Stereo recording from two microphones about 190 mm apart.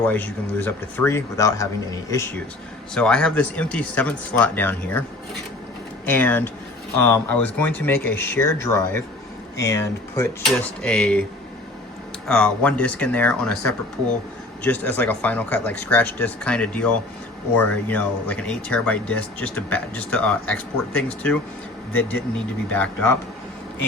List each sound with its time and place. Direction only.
0.0 s speech: 10° left (ahead or behind)
9.6 s speech: 15° left (ahead or behind)
10.4 s speech: 5° left (ahead or behind)
12.3 s speech: 5° left (ahead or behind)
22.7 s speech: 10° left (ahead or behind)